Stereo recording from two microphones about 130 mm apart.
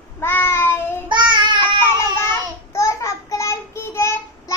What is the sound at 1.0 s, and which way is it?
Child singing, 35° right (ahead or behind).